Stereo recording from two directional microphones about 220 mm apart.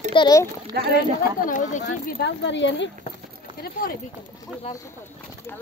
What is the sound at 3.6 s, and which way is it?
Speech, 40° left (ahead or behind).